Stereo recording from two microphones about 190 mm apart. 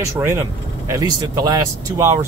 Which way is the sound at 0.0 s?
15° right (ahead or behind).